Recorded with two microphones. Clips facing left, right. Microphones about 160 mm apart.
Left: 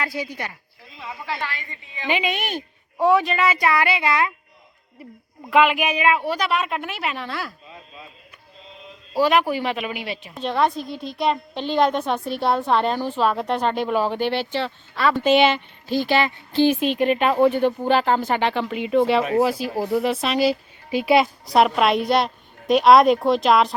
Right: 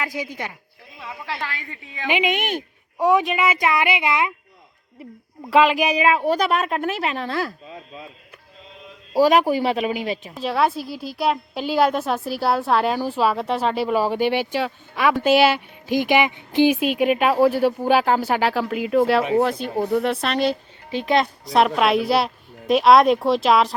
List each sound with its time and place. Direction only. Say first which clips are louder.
0.0 s speech: even; 15° right (ahead or behind)
0.9 s a woman's voice: left 1 dB; centre (ahead or behind)
2.0 s speech: right 2 dB; 15° right (ahead or behind)
5.5 s a woman's voice: right 1 dB; 35° right (ahead or behind)
9.1 s a woman's voice: right 3 dB; 40° right (ahead or behind)
10.3 s a woman's voice: even; 5° right (ahead or behind)